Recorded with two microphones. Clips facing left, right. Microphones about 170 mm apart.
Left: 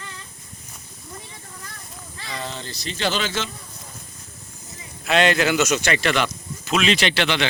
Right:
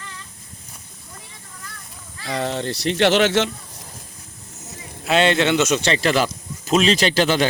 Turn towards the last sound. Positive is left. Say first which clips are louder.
# right 4 dB
turn(degrees=-40)  # may be behind; listen again after turning